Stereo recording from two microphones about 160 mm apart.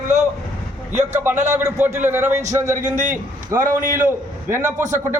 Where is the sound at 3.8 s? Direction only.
50° right (ahead or behind).